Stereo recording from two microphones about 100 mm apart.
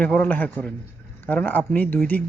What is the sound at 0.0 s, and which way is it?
Speech, 15° left (ahead or behind).